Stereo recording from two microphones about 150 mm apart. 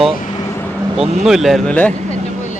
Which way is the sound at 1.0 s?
45° right (ahead or behind).